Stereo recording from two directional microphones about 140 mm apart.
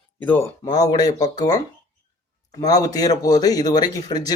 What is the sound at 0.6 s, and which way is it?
Speech, 25° left (ahead or behind).